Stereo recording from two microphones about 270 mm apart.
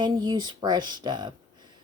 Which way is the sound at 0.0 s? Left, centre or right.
Centre.